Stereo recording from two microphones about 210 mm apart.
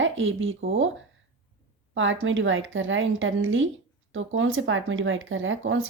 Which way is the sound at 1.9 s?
65° right (ahead or behind).